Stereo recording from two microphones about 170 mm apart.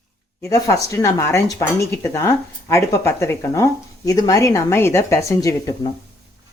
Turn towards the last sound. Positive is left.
turn(degrees=20)  # may be behind; listen again after turning